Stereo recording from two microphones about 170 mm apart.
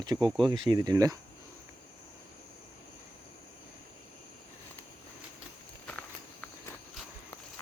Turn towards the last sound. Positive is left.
turn(degrees=10)  # may be behind; listen again after turning